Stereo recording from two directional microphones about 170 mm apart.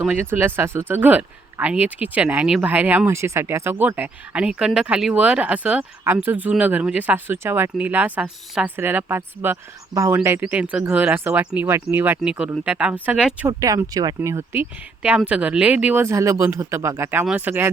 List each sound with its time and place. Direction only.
0.0 s speech: 10° right (ahead or behind)
13.5 s speech: 20° right (ahead or behind)